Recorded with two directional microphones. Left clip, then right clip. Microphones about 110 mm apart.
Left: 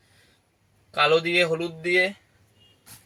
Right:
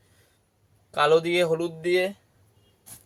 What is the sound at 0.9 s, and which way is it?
Speech, 20° right (ahead or behind).